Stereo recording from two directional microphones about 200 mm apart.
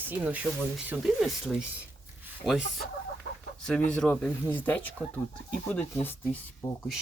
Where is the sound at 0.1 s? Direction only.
10° right (ahead or behind).